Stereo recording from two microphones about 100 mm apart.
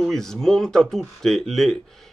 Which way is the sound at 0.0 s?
5° left (ahead or behind).